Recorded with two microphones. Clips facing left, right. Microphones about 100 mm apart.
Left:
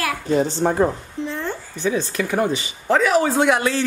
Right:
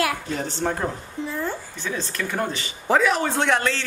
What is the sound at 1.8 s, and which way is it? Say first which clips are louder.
Speech: left 8 dB; 15° left (ahead or behind).